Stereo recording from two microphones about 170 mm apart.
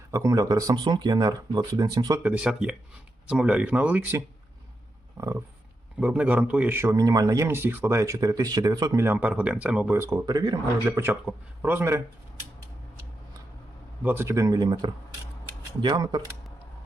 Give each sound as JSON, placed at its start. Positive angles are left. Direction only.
{"t": 0.1, "sound": "speech", "side_deg": -20}
{"t": 2.2, "sound": "a man's voice", "side_deg": -5}
{"t": 6.0, "sound": "a man's voice", "side_deg": -5}
{"t": 14.0, "sound": "speech", "side_deg": -10}